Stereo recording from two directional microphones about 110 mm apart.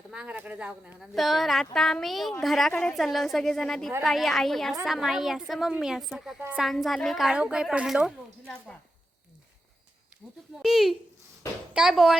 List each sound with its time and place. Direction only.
0.1 s speech: 10° right (ahead or behind)
0.9 s a woman's voice: centre (ahead or behind)
10.6 s a woman's voice: 5° right (ahead or behind)